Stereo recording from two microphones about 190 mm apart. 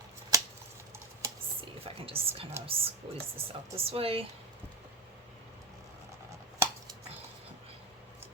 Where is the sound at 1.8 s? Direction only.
30° right (ahead or behind).